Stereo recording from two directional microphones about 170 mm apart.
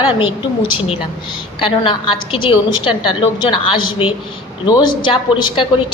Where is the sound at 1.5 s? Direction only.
30° left (ahead or behind).